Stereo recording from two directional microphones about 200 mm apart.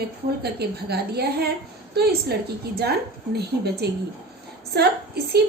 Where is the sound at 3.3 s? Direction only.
55° right (ahead or behind).